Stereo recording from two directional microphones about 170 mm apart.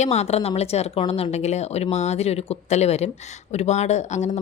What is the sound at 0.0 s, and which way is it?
A woman's voice, 40° left (ahead or behind).